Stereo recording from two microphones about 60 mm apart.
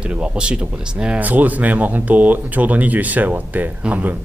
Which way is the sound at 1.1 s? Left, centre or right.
Right.